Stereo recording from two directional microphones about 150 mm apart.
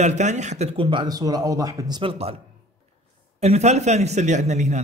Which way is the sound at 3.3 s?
50° right (ahead or behind).